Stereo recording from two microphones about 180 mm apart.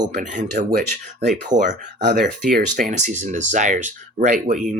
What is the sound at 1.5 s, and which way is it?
Speech, 20° right (ahead or behind).